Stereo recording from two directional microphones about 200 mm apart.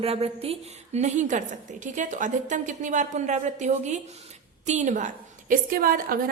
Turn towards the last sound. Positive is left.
turn(degrees=-45)  # may be behind; listen again after turning